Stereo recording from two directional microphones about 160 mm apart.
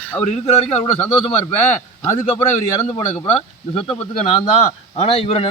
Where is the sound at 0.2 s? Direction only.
40° left (ahead or behind).